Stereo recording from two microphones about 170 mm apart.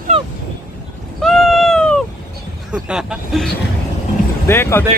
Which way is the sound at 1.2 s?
Centre (ahead or behind).